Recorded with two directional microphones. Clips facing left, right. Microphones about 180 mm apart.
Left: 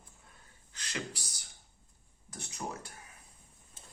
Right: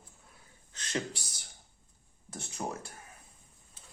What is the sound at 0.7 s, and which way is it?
Speech, 20° right (ahead or behind).